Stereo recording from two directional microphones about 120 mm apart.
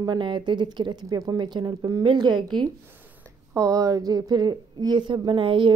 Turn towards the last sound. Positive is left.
turn(degrees=-45)  # may be behind; listen again after turning